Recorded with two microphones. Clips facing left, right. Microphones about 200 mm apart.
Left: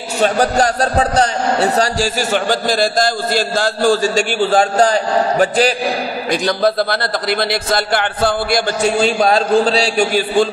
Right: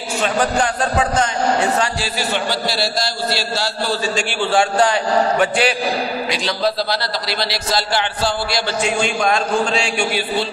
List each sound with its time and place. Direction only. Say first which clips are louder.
0.2 s a man's voice: left 5 dB; 40° left (ahead or behind)
6.3 s a man's voice: left 8 dB; 50° left (ahead or behind)
9.0 s a man's voice: left 5 dB; 35° left (ahead or behind)